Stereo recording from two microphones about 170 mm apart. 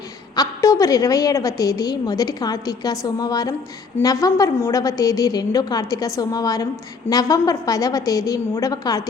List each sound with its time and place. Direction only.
0.3 s a woman's voice: 20° left (ahead or behind)